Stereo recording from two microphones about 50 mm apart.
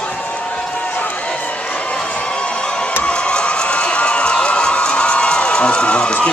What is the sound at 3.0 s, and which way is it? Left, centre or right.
Run, left.